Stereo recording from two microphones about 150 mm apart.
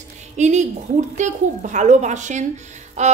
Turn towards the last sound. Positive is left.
turn(degrees=-50)  # may be behind; listen again after turning